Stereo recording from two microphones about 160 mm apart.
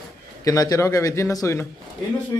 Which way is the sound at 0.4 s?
20° left (ahead or behind).